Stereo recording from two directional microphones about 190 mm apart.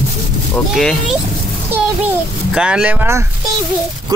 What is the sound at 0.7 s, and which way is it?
Speech, centre (ahead or behind).